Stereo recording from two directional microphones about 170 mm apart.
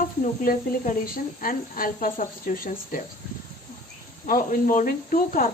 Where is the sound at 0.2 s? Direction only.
50° left (ahead or behind).